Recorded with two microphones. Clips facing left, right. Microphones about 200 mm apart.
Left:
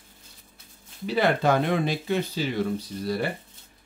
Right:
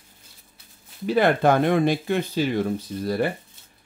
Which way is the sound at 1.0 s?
50° right (ahead or behind).